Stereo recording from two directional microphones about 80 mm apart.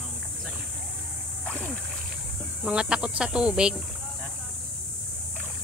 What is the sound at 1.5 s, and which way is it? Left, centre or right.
Splash, centre.